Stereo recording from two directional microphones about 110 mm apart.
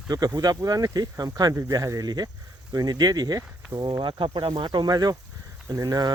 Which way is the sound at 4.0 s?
45° right (ahead or behind).